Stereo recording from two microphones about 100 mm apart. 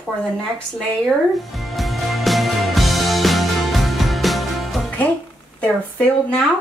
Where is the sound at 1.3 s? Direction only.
Centre (ahead or behind).